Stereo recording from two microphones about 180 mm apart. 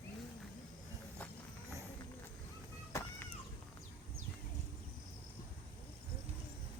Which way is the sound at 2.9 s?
15° left (ahead or behind).